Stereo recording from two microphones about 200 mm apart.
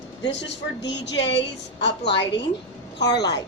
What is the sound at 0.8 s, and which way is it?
A woman's voice, 60° left (ahead or behind).